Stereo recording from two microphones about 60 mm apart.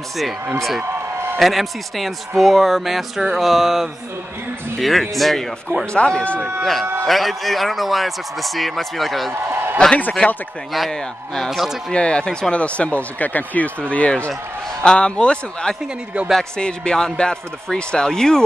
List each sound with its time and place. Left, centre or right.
1.4 s a man's voice: centre
5.9 s speech: centre
6.6 s a man's voice: centre
9.3 s a sound: right
10.2 s speech: left
10.9 s a man's voice: centre
11.5 s speech: centre
11.9 s a man's voice: centre